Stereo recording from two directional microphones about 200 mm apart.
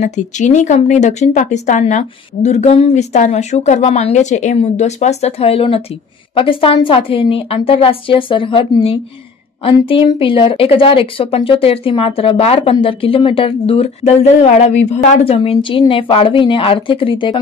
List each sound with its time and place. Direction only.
0.0 s speech: 35° left (ahead or behind)